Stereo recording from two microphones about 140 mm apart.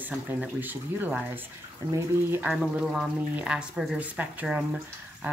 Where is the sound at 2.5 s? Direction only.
Centre (ahead or behind).